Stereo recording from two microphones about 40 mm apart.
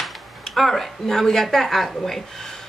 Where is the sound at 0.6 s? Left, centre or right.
Centre.